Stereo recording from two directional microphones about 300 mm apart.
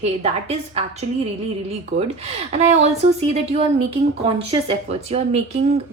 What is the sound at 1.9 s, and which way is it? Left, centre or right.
Speech, right.